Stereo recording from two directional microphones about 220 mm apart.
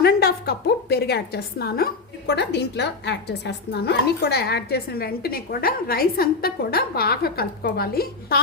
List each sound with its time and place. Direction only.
0.0 s a woman's voice: 45° left (ahead or behind)